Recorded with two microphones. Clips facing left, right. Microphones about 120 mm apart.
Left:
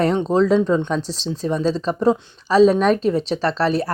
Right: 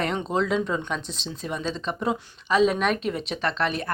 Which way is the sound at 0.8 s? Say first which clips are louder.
Left 8 dB; 35° left (ahead or behind).